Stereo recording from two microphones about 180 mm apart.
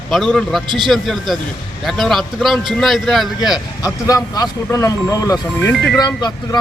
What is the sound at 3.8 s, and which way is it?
Speech, 20° left (ahead or behind).